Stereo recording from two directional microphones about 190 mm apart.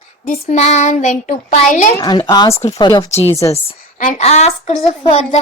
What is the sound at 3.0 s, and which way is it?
A child's voice, 35° left (ahead or behind).